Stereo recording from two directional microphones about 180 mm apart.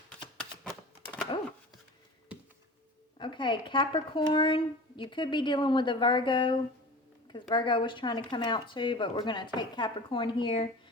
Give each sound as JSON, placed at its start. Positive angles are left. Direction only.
{"t": 0.1, "sound": "typewriter", "side_deg": 5}
{"t": 3.2, "sound": "speech", "side_deg": 25}